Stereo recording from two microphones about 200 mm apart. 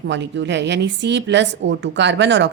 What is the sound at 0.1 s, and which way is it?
A woman's voice, 65° right (ahead or behind).